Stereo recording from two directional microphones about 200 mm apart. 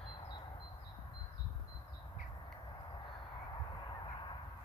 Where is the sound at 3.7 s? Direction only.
25° left (ahead or behind).